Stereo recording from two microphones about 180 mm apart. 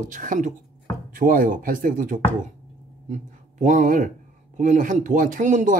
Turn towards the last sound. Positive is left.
turn(degrees=-45)  # may be behind; listen again after turning